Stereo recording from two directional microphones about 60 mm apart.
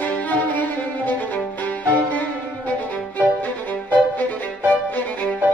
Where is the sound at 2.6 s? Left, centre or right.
Left.